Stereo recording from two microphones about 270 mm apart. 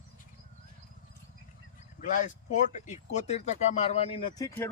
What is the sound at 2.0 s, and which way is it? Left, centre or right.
Speech, left.